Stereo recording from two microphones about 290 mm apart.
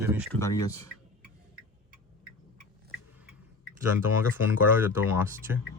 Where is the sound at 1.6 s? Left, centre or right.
Right.